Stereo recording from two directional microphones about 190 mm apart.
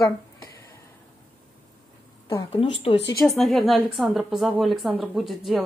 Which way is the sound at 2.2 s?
20° left (ahead or behind).